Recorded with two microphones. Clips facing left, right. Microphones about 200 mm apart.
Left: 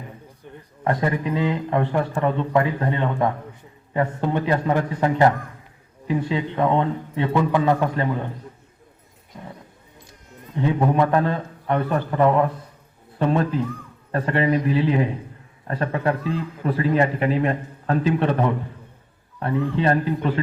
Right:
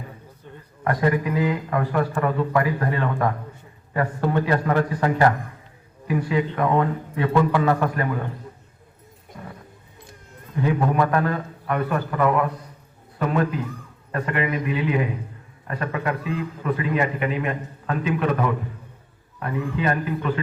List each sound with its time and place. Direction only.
0.4 s a sound: 15° left (ahead or behind)
0.9 s speech: 25° left (ahead or behind)
9.3 s music: 20° left (ahead or behind)
10.5 s a man's voice: 25° left (ahead or behind)